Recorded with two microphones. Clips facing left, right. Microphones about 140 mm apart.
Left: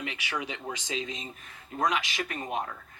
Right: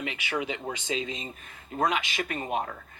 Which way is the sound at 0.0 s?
10° right (ahead or behind).